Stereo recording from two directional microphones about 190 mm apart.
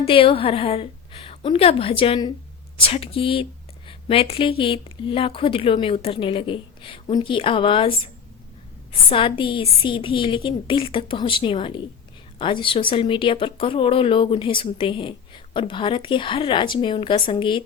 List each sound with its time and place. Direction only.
0.0 s speech: 30° left (ahead or behind)